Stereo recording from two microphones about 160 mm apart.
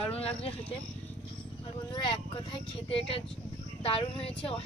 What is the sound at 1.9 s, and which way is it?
Speech, 30° left (ahead or behind).